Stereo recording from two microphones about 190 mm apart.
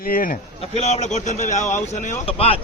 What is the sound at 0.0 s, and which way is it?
Speech, 50° left (ahead or behind).